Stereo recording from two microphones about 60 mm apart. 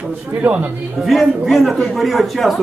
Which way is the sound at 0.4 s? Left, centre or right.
Right.